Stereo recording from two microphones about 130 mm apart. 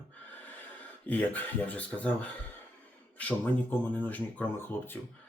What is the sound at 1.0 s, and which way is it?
Speech, 15° left (ahead or behind).